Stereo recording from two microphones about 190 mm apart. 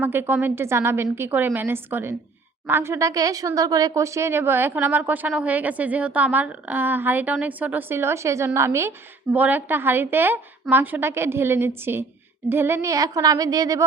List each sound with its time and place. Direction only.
0.0 s speech: 10° right (ahead or behind)